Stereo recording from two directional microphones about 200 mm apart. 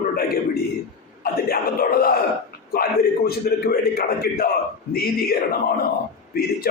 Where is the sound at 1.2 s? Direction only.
50° left (ahead or behind).